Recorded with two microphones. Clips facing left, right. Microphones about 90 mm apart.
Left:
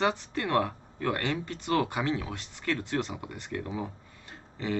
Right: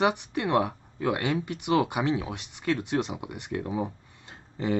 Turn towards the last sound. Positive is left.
turn(degrees=-15)  # may be behind; listen again after turning